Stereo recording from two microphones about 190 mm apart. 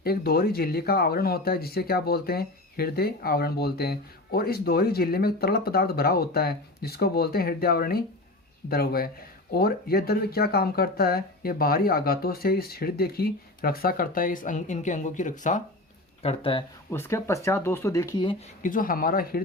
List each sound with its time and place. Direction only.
0.0 s speech: 55° left (ahead or behind)
16.2 s speech: 30° left (ahead or behind)
16.9 s speech: 15° left (ahead or behind)
18.2 s speech: 30° left (ahead or behind)
18.6 s speech: 45° left (ahead or behind)